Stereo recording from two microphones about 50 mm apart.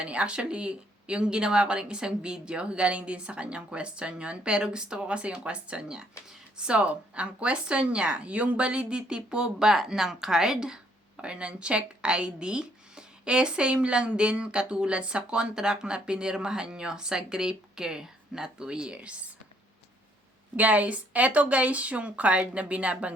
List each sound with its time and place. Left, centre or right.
0.0 s speech: right
18.9 s speech: right
20.6 s speech: right